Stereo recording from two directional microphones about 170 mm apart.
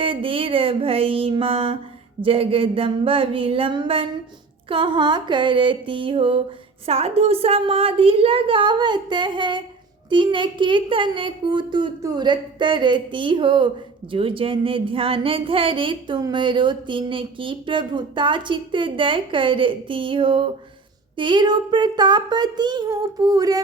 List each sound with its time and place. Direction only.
0.0 s a woman's voice: 30° right (ahead or behind)